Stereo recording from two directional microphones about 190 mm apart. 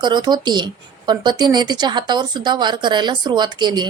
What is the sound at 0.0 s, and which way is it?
A woman's voice, 25° right (ahead or behind).